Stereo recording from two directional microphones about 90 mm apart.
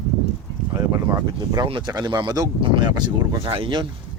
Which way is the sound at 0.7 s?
40° right (ahead or behind).